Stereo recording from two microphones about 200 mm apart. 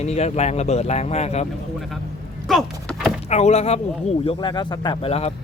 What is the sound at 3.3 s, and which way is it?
Speech, 35° left (ahead or behind).